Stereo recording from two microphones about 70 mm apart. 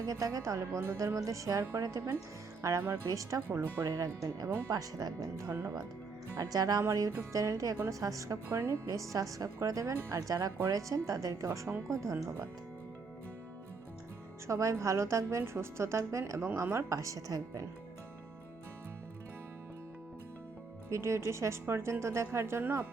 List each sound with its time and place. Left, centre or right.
0.1 s a woman's voice: right
3.9 s speech: right
6.8 s a woman's voice: right
8.4 s a woman's voice: right
10.2 s a woman's voice: right
14.4 s a woman's voice: right
20.9 s a woman's voice: right